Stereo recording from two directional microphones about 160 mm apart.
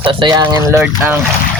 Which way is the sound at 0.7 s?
15° right (ahead or behind).